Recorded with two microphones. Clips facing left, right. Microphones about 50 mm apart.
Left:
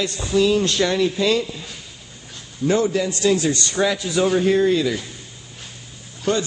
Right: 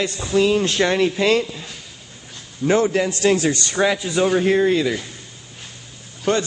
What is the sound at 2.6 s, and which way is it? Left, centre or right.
Speech, right.